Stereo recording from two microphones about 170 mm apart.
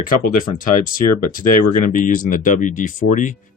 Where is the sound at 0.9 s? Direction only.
55° left (ahead or behind).